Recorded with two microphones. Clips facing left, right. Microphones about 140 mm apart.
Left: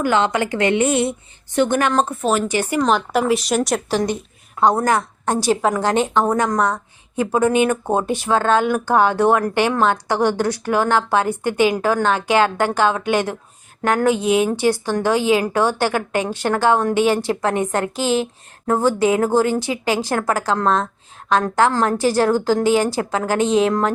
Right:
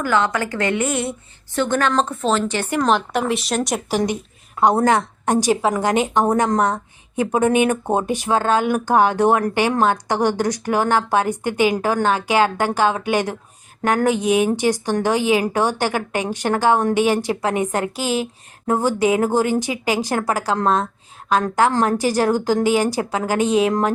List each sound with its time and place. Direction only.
0.0 s a woman's voice: 20° left (ahead or behind); by 3.8 s centre (ahead or behind)
3.8 s speech: 15° right (ahead or behind)